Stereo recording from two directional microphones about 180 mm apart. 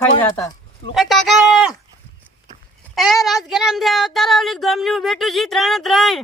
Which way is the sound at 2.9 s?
Centre (ahead or behind).